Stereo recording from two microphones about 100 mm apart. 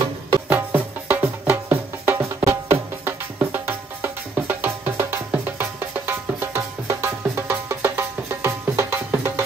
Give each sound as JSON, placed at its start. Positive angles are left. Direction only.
{"t": 0.5, "sound": "music", "side_deg": -20}